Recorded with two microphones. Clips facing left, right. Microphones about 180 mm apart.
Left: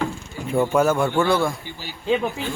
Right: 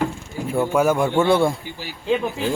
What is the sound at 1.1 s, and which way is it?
Speech, 25° right (ahead or behind).